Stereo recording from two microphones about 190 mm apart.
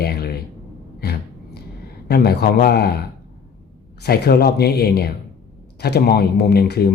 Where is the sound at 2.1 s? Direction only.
55° left (ahead or behind).